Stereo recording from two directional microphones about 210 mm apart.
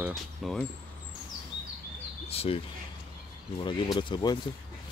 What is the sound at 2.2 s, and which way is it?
Speech, 30° left (ahead or behind).